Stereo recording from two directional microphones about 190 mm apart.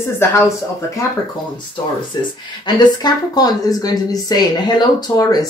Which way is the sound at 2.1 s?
25° left (ahead or behind).